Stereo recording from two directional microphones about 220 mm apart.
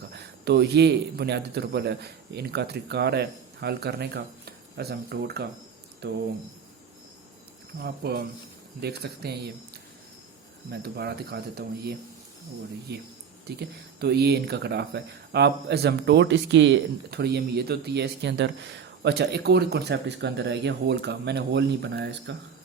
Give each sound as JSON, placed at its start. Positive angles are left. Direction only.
{"t": 0.1, "sound": "speech", "side_deg": -50}
{"t": 7.8, "sound": "speech", "side_deg": -45}
{"t": 10.7, "sound": "speech", "side_deg": -45}
{"t": 13.6, "sound": "speech", "side_deg": -45}